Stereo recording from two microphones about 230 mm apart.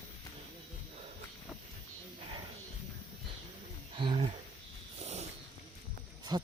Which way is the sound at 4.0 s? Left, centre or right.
Right.